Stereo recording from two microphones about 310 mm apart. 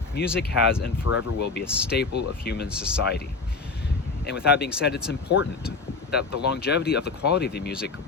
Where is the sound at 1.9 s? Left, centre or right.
Left.